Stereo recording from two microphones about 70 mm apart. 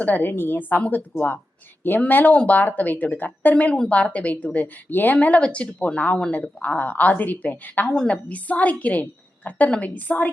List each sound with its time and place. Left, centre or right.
0.0 s speech: left
5.1 s speech: centre